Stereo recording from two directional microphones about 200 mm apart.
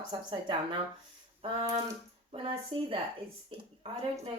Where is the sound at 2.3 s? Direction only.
25° right (ahead or behind).